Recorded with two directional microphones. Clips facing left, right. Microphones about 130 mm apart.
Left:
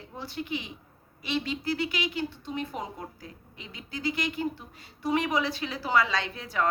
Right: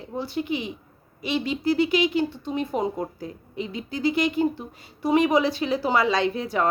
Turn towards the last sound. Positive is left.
turn(degrees=-20)  # may be behind; listen again after turning